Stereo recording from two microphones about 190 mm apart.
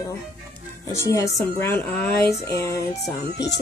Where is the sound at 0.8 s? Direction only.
15° left (ahead or behind).